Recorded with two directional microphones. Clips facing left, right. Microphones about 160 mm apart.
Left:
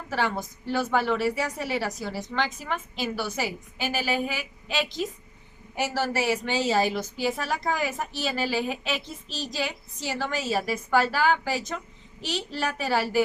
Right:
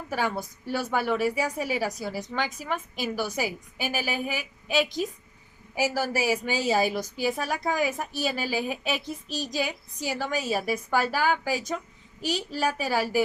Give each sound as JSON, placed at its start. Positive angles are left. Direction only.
{"t": 0.1, "sound": "a woman's voice", "side_deg": -10}